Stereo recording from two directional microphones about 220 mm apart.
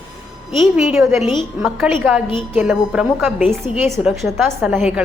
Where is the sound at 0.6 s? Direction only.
5° right (ahead or behind).